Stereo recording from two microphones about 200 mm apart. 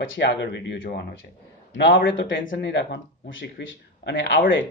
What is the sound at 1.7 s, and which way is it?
A man's voice, 65° left (ahead or behind).